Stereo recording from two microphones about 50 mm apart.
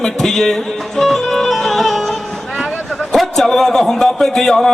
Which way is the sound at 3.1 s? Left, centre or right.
Centre.